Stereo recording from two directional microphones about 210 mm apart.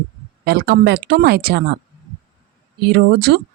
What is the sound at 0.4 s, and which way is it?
A woman's voice, 50° right (ahead or behind).